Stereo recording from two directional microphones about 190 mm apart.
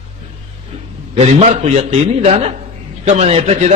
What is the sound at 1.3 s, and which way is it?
A man's voice, 35° right (ahead or behind).